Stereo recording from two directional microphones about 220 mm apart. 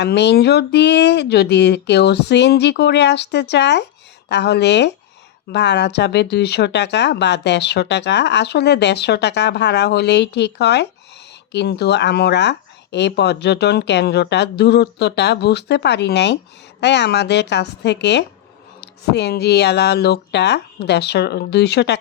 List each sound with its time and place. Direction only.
0.0 s speech: 50° left (ahead or behind)